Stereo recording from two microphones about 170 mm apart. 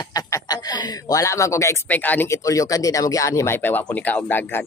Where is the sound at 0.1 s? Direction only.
20° left (ahead or behind).